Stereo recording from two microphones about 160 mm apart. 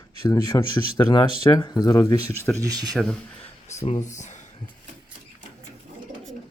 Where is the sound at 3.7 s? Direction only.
45° left (ahead or behind).